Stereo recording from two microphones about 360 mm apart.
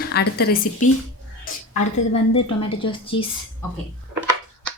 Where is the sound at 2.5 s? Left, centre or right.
Centre.